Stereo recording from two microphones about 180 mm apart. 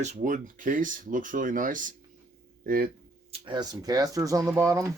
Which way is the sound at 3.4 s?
25° right (ahead or behind).